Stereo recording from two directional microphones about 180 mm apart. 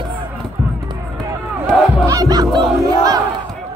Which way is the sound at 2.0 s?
20° right (ahead or behind).